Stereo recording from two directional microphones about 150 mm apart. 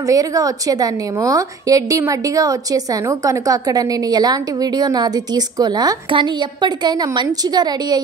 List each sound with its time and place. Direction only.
0.0 s a woman's voice: 25° right (ahead or behind)